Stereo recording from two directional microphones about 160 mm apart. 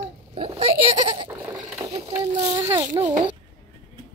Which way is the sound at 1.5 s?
15° right (ahead or behind).